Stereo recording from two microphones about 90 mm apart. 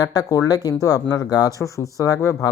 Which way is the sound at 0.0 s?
45° left (ahead or behind).